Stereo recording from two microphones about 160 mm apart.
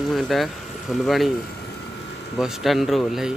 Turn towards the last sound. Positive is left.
turn(degrees=0)  # may be behind; listen again after turning